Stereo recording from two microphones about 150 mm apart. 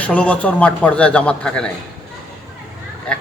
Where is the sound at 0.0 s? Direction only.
10° left (ahead or behind).